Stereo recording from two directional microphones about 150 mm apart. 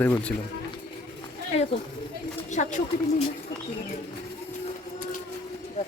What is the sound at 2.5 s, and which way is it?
Speech, 55° left (ahead or behind).